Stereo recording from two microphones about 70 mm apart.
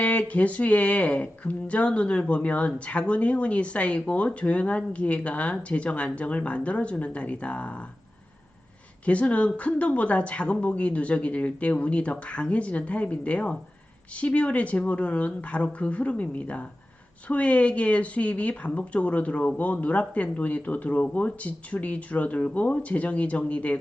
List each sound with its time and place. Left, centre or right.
0.0 s speech: left
9.0 s speech: centre